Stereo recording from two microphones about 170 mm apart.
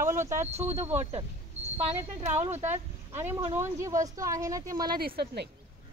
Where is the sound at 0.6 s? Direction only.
15° right (ahead or behind).